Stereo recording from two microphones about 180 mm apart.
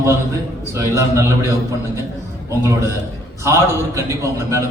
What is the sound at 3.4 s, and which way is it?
Speech, 15° right (ahead or behind).